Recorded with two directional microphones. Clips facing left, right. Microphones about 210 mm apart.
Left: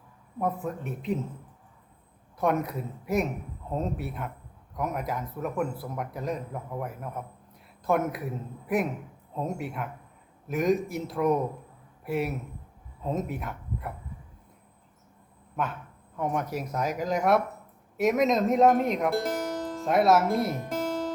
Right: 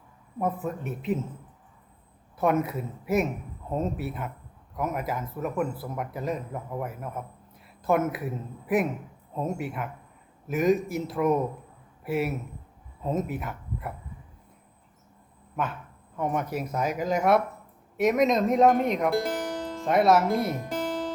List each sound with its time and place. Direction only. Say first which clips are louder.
0.3 s speech: right 1 dB; centre (ahead or behind)
2.4 s speech: right 2 dB; 5° right (ahead or behind)
16.1 s speech: right 1 dB; centre (ahead or behind)